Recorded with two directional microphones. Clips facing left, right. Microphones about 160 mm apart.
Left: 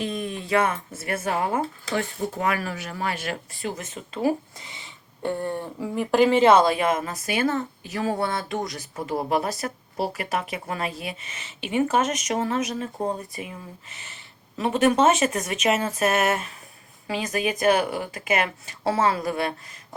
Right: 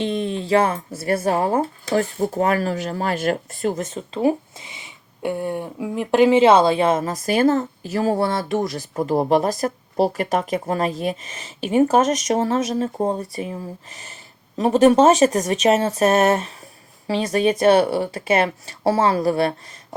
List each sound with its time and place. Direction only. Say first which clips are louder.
0.0 s speech: right 6 dB; 30° right (ahead or behind); by 3.8 s 45° right (ahead or behind)
3.8 s speech: right 6 dB; 35° right (ahead or behind)
9.0 s speech: right 7 dB; 40° right (ahead or behind)